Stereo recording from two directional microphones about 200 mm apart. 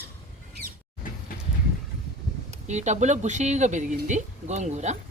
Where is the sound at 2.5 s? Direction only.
35° right (ahead or behind).